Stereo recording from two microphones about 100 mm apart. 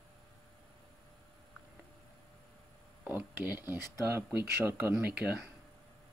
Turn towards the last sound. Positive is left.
turn(degrees=-15)  # may be behind; listen again after turning